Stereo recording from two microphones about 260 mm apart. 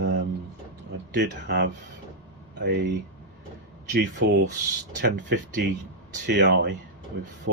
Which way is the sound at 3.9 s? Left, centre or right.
Right.